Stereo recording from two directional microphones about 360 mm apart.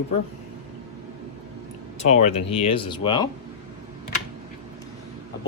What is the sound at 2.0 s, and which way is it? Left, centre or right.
Speech, centre.